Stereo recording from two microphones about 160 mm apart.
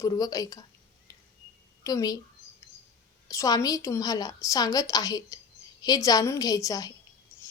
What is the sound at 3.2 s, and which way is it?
A woman's voice, 20° left (ahead or behind).